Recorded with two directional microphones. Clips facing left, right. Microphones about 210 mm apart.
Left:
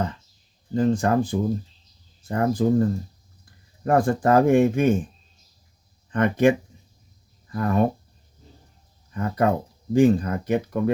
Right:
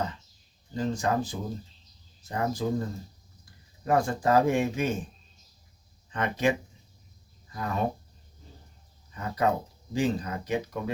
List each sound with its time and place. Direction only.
0.8 s speech: 55° left (ahead or behind)
3.8 s speech: 55° left (ahead or behind)
6.1 s speech: 55° left (ahead or behind)
7.5 s speech: 55° left (ahead or behind)
9.1 s speech: 55° left (ahead or behind)